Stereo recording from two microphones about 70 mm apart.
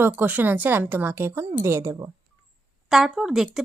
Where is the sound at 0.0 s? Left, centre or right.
Right.